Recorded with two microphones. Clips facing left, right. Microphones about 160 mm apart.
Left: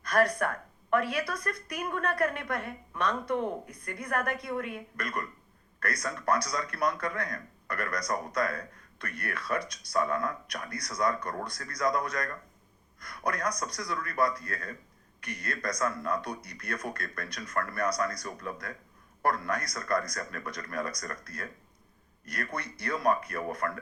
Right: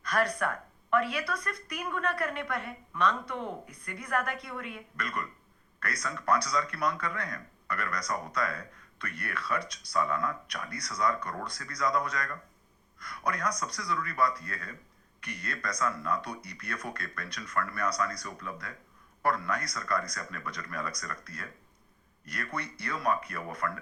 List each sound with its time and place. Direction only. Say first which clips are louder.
0.1 s speech: left 3 dB; 45° left (ahead or behind)